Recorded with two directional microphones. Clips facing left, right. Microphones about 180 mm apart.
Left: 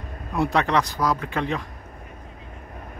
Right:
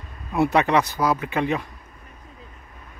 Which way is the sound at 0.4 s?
5° right (ahead or behind).